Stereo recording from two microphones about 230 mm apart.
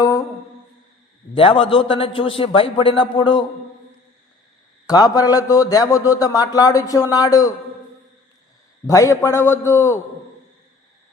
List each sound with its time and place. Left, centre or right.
1.3 s a man's voice: left
4.9 s a man's voice: centre
8.9 s a man's voice: centre